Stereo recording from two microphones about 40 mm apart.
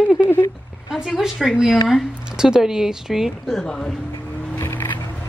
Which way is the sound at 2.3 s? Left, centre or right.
Centre.